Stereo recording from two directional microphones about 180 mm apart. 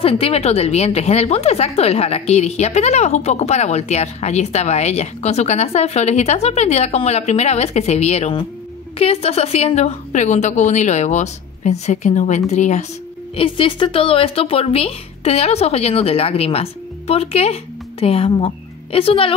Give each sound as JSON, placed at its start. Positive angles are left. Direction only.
{"t": 0.0, "sound": "a woman's voice", "side_deg": 35}
{"t": 13.4, "sound": "a woman's voice", "side_deg": 30}